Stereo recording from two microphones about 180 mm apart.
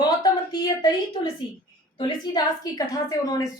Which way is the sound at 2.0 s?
25° left (ahead or behind).